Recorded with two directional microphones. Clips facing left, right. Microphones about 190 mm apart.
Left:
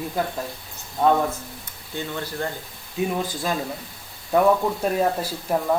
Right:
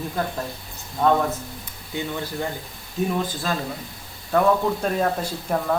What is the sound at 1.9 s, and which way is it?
Speech, 15° right (ahead or behind).